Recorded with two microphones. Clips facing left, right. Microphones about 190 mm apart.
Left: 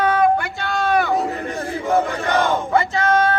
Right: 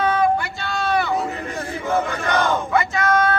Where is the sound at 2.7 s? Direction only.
30° left (ahead or behind).